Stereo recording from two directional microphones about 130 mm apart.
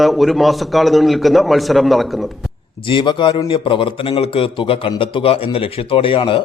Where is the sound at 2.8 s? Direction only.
35° left (ahead or behind).